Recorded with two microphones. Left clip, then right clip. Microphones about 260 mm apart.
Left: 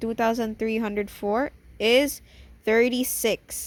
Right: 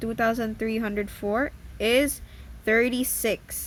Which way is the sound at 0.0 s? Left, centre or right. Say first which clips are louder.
Left 1 dB; centre.